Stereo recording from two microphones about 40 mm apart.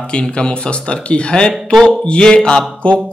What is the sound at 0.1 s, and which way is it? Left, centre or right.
Speech, left.